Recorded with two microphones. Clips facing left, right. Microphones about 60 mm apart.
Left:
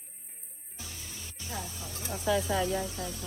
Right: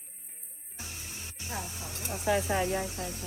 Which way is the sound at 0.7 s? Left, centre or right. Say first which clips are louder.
Right 1 dB; right.